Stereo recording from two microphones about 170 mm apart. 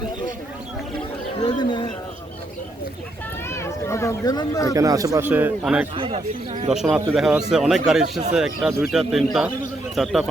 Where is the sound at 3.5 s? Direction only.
15° left (ahead or behind).